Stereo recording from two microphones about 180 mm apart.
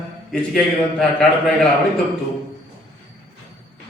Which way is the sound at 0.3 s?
Centre (ahead or behind).